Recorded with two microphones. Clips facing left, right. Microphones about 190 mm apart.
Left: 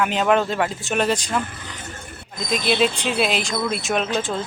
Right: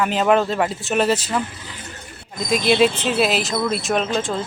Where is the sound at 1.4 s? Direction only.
55° left (ahead or behind).